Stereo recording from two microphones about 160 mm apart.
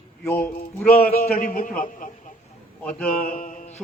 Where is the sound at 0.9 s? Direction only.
60° left (ahead or behind).